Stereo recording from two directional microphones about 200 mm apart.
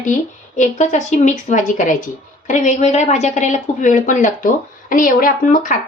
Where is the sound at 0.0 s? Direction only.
40° left (ahead or behind).